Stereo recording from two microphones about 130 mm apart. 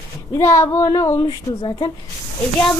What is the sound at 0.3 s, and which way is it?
Speech, 20° left (ahead or behind).